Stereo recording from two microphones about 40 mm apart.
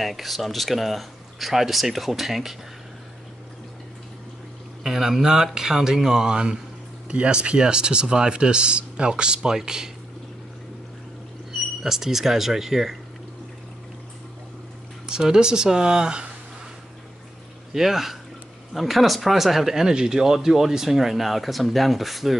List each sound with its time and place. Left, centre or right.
0.0 s speech: centre
4.8 s speech: centre
11.8 s speech: centre
15.0 s speech: centre
17.7 s speech: centre